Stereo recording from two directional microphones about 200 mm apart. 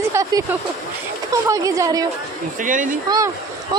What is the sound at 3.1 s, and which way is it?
Speech, 15° right (ahead or behind).